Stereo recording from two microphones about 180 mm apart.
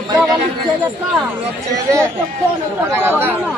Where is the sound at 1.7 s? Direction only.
20° right (ahead or behind).